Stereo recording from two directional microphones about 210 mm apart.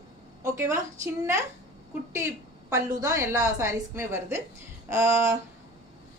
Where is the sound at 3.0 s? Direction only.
15° right (ahead or behind).